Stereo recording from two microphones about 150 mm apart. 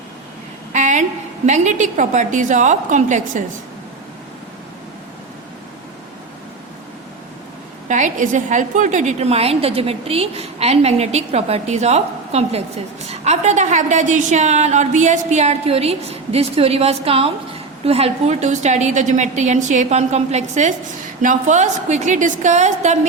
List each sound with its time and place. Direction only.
0.7 s a sound: 55° right (ahead or behind)
1.5 s a woman's voice: 55° right (ahead or behind)
7.9 s a woman's voice: 55° right (ahead or behind)